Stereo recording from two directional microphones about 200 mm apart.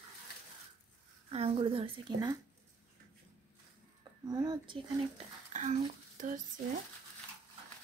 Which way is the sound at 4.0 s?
20° right (ahead or behind).